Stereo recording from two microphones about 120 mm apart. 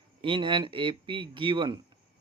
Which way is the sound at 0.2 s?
45° right (ahead or behind).